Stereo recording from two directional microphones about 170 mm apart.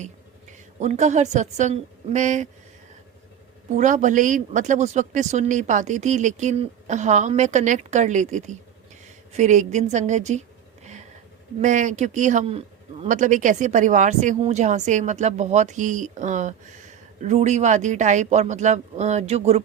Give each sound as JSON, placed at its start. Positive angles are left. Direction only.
{"t": 0.8, "sound": "speech", "side_deg": -45}
{"t": 3.7, "sound": "speech", "side_deg": -45}
{"t": 11.6, "sound": "speech", "side_deg": -45}